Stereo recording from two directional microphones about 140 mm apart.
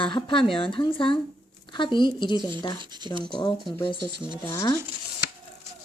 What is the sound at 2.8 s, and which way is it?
Speech, 30° right (ahead or behind).